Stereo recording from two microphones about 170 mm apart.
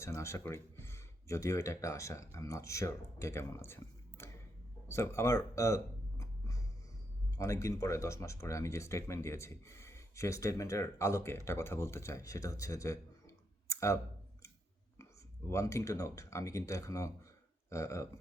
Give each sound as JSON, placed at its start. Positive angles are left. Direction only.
{"t": 0.0, "sound": "speech", "side_deg": 15}
{"t": 15.4, "sound": "speech", "side_deg": 15}